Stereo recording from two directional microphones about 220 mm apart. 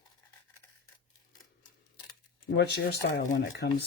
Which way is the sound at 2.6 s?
40° left (ahead or behind).